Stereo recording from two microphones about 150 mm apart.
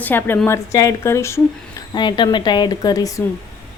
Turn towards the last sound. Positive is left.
turn(degrees=25)  # may be behind; listen again after turning